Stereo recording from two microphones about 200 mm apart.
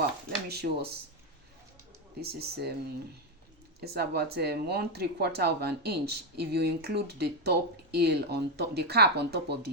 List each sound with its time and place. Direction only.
0.4 s speech: 55° right (ahead or behind)
2.2 s speech: 55° right (ahead or behind)
3.8 s speech: 55° right (ahead or behind)